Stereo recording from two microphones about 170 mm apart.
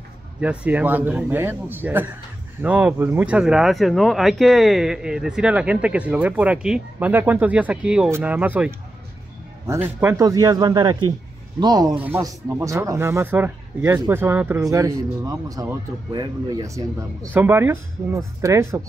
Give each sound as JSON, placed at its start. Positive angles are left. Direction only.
{"t": 0.4, "sound": "a man's voice", "side_deg": -10}
{"t": 11.9, "sound": "speech", "side_deg": -10}